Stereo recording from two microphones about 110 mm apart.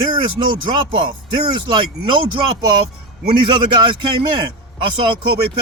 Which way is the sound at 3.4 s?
50° right (ahead or behind).